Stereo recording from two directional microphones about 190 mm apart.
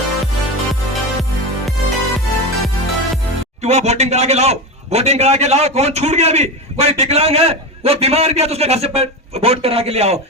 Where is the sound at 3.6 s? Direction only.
35° right (ahead or behind).